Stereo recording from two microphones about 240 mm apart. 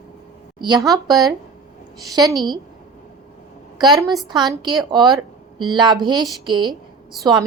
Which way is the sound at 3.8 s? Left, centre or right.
Centre.